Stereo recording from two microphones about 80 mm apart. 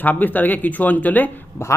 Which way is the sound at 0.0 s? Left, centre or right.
Left.